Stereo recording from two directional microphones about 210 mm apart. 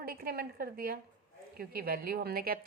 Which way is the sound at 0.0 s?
45° right (ahead or behind).